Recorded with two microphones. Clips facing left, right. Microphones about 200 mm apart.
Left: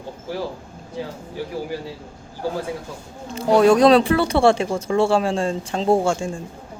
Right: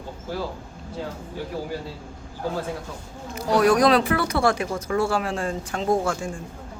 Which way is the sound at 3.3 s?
25° left (ahead or behind).